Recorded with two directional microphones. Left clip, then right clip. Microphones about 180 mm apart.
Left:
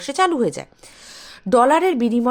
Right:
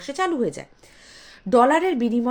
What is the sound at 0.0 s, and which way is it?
Speech, 45° left (ahead or behind).